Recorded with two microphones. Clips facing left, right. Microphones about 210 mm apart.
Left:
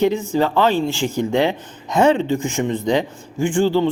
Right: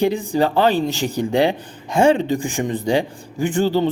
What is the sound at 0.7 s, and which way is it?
Speech, 15° right (ahead or behind).